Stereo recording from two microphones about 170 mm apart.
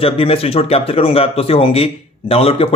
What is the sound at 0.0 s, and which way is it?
Speech, 35° left (ahead or behind).